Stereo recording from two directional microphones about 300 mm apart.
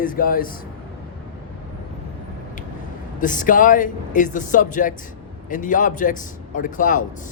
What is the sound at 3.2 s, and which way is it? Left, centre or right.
Speech, left.